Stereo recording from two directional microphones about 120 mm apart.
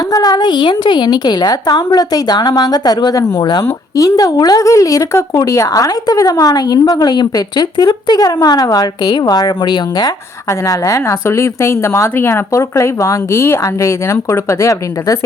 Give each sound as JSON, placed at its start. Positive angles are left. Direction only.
{"t": 0.1, "sound": "a woman's voice", "side_deg": 35}